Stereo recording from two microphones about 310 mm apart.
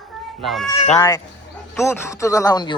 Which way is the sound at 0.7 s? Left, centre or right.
Centre.